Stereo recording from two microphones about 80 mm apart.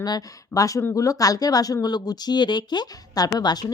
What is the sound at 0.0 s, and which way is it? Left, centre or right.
A woman's voice, left.